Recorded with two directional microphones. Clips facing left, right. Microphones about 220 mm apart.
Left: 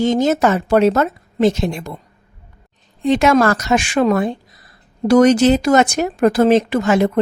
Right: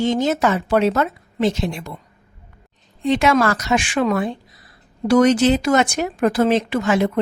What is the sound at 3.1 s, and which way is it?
Speech, 45° left (ahead or behind).